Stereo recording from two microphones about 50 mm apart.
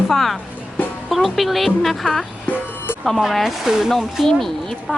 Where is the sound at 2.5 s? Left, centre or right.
Left.